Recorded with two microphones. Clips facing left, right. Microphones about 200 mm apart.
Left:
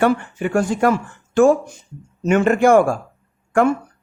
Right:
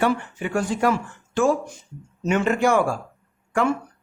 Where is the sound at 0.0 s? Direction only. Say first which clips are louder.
Left 5 dB; 50° left (ahead or behind).